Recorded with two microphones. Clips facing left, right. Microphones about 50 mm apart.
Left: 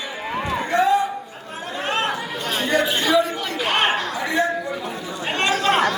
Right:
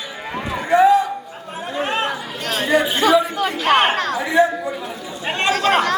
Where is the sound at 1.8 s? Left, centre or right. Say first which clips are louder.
Right 1 dB; centre.